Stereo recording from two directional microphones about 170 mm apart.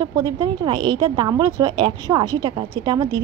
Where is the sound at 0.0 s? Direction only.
25° right (ahead or behind).